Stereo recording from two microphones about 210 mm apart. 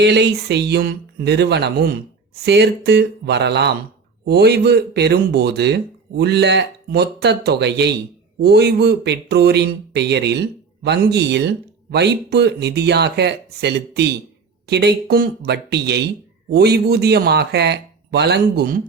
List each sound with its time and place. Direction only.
0.0 s speech: 55° right (ahead or behind)